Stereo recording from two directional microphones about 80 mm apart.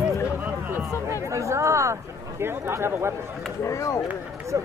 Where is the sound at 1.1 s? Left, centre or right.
Right.